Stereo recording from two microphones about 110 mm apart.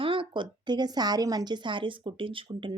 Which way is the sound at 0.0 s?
50° right (ahead or behind).